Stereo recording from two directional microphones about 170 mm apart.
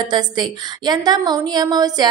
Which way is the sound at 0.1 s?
25° right (ahead or behind).